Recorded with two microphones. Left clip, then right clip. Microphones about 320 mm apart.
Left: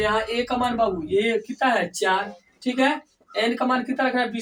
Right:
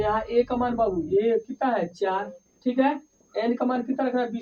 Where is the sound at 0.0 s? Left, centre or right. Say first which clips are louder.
Even; right.